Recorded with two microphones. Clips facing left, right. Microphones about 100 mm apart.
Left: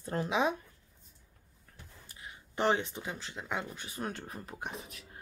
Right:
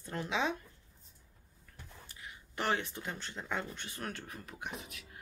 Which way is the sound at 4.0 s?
30° left (ahead or behind).